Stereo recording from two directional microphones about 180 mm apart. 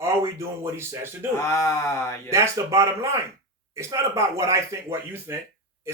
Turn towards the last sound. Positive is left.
turn(degrees=-15)  # may be behind; listen again after turning